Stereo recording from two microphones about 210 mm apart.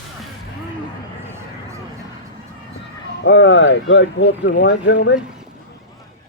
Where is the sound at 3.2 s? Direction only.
60° left (ahead or behind).